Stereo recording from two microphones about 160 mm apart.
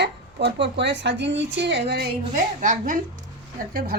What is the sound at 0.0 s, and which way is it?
A woman's voice, 90° right.